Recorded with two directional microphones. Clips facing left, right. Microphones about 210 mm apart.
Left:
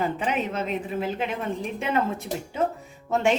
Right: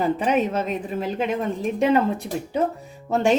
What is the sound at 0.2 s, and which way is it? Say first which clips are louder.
A woman's voice: right 5 dB; 40° right (ahead or behind).